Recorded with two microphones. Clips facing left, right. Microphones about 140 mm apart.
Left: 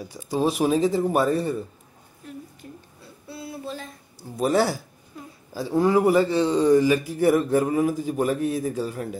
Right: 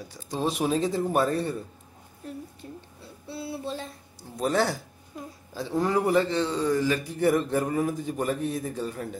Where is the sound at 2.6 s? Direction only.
25° right (ahead or behind).